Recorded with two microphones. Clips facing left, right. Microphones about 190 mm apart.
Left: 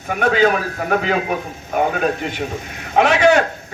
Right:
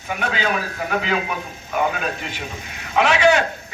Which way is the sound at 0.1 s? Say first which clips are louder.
Left 8 dB; 45° left (ahead or behind).